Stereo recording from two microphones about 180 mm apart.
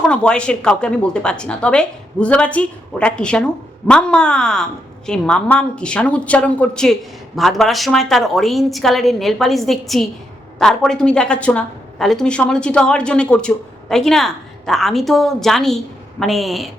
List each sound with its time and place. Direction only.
0.0 s a woman's voice: 5° left (ahead or behind)